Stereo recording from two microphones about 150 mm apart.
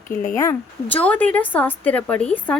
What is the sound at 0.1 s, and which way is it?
A woman's voice, 5° left (ahead or behind).